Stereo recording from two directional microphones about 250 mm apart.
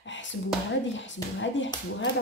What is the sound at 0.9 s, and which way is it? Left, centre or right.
A woman's voice, left.